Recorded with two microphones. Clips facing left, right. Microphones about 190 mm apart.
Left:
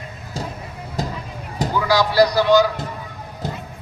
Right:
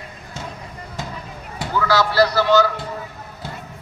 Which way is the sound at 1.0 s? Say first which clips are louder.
Left 6 dB; 40° left (ahead or behind).